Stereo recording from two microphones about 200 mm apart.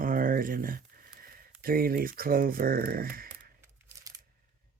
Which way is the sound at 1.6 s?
45° right (ahead or behind).